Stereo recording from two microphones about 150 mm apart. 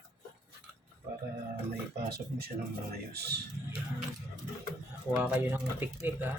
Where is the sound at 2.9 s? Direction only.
90° right.